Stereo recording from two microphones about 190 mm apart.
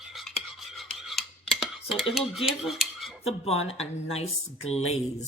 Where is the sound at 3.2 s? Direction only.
30° left (ahead or behind).